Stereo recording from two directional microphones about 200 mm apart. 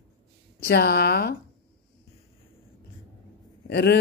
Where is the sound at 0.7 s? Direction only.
55° left (ahead or behind).